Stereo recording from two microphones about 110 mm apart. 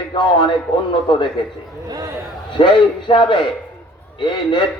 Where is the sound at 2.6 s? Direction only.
45° left (ahead or behind).